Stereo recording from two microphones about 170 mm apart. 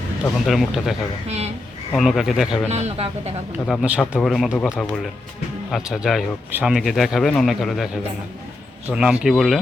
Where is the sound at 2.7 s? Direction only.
40° right (ahead or behind).